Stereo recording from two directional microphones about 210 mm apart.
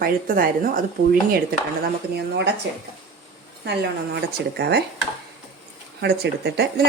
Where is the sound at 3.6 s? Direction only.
50° right (ahead or behind).